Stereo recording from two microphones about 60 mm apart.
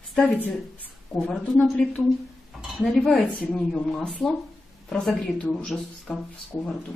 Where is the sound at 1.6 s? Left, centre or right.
Centre.